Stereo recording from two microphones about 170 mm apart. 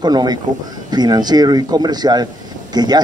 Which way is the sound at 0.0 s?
25° right (ahead or behind).